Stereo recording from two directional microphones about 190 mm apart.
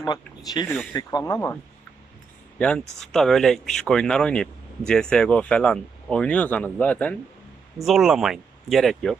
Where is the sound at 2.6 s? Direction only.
5° left (ahead or behind).